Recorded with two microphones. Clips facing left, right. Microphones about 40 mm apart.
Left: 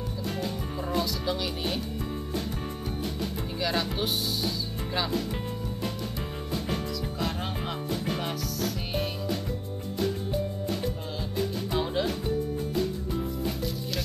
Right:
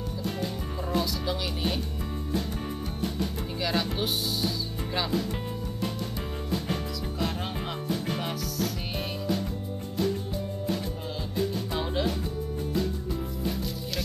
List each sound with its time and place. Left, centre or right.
0.2 s music: centre
3.0 s music: centre
4.9 s speech: centre
6.7 s music: centre
11.7 s music: centre
13.4 s music: centre